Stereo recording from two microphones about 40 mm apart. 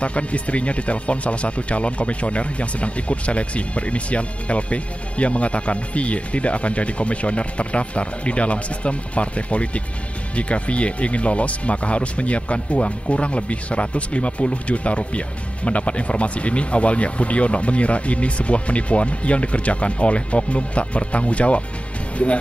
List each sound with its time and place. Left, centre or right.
0.0 s speech: left